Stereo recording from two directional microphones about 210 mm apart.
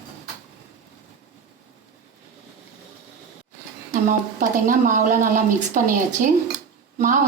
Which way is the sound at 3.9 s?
40° right (ahead or behind).